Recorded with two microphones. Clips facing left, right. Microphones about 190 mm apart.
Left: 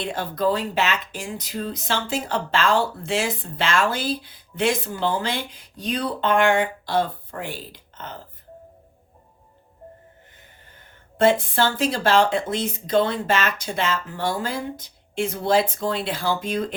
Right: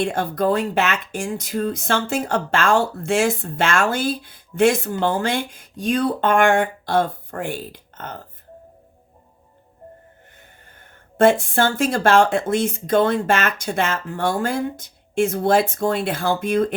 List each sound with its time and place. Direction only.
0.0 s speech: 50° right (ahead or behind)
11.2 s speech: 50° right (ahead or behind)